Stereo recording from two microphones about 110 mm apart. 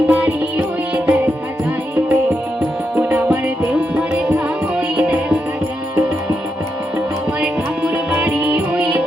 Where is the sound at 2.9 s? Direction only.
5° right (ahead or behind).